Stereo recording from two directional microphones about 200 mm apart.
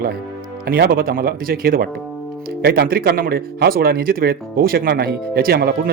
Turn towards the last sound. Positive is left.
turn(degrees=-50)  # may be behind; listen again after turning